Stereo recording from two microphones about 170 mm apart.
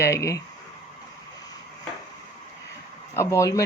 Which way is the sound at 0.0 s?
15° left (ahead or behind).